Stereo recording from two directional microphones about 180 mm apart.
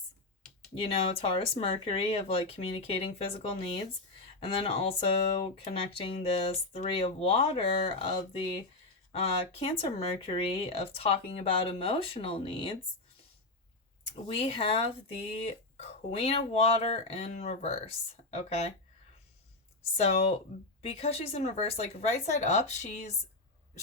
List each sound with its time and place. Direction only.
0.8 s speech: 30° left (ahead or behind)
14.3 s speech: 30° left (ahead or behind)
20.0 s speech: 35° left (ahead or behind)